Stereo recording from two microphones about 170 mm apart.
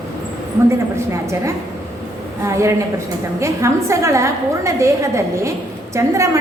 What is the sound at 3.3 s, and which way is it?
A woman's voice, 15° right (ahead or behind).